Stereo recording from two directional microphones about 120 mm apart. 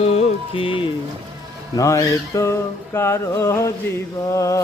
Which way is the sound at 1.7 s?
25° left (ahead or behind).